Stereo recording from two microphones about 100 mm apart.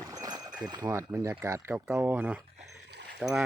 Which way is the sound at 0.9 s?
30° right (ahead or behind).